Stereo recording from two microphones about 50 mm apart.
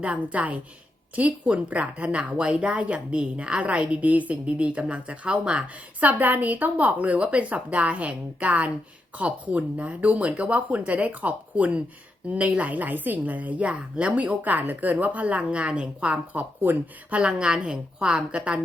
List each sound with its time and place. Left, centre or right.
0.0 s a woman's voice: right
6.0 s a woman's voice: right
17.2 s a woman's voice: centre